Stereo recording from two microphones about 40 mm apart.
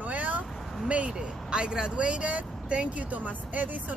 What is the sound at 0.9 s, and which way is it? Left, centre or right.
Speech, right.